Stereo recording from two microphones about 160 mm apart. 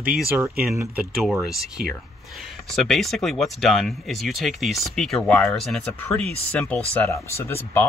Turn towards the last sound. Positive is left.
turn(degrees=15)  # may be behind; listen again after turning